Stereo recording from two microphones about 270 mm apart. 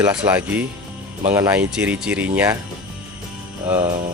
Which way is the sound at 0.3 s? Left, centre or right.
Centre.